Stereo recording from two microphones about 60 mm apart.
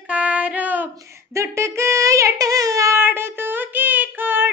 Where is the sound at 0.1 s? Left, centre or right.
Right.